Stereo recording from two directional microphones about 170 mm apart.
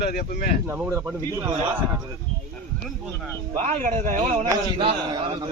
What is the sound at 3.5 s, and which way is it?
Speech, 45° right (ahead or behind).